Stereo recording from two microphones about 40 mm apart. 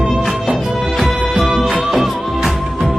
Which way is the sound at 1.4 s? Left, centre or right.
Centre.